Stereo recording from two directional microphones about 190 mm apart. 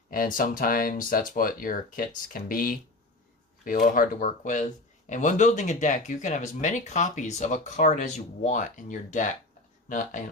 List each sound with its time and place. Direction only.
0.1 s speech: 45° left (ahead or behind)